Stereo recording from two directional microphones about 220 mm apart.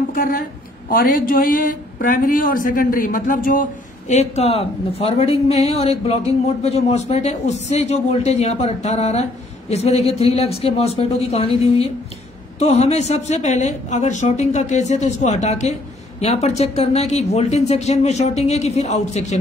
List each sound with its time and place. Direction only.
0.1 s a woman's voice: 40° left (ahead or behind)